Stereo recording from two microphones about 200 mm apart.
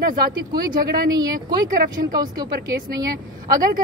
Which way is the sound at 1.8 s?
45° right (ahead or behind).